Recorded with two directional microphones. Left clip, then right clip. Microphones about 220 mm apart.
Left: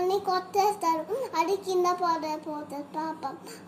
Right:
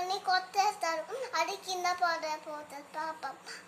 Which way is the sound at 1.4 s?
25° right (ahead or behind).